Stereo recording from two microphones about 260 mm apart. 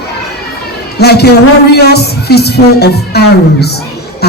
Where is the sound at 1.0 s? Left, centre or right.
Left.